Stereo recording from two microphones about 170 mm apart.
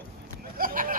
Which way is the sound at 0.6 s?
55° right (ahead or behind).